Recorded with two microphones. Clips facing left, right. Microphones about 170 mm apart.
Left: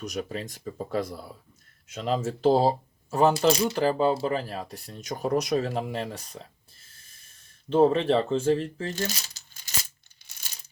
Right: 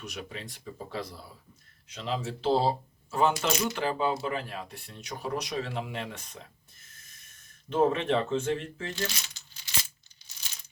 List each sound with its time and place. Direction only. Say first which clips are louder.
0.0 s speech: left 8 dB; 40° left (ahead or behind)